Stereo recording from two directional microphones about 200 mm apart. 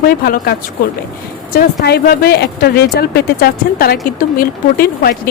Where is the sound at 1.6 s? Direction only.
50° left (ahead or behind).